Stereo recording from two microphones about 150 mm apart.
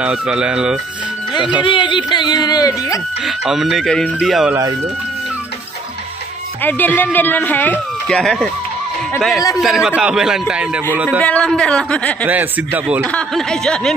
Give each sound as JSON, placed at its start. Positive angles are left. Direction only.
{"t": 0.0, "sound": "speech", "side_deg": -5}
{"t": 1.6, "sound": "speech", "side_deg": 35}
{"t": 3.2, "sound": "speech", "side_deg": -5}
{"t": 6.6, "sound": "speech", "side_deg": 10}
{"t": 9.6, "sound": "speech", "side_deg": -5}
{"t": 11.1, "sound": "speech", "side_deg": 10}
{"t": 12.3, "sound": "speech", "side_deg": -10}
{"t": 13.0, "sound": "speech", "side_deg": 0}